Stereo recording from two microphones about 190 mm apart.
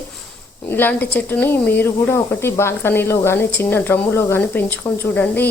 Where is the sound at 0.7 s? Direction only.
10° left (ahead or behind).